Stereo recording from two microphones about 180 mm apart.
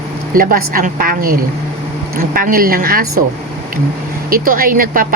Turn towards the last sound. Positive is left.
turn(degrees=-50)  # may be behind; listen again after turning